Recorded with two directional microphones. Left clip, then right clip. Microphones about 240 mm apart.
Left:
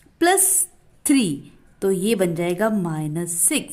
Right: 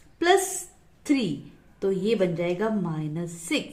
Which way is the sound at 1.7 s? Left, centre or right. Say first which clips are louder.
Left 4 dB; left.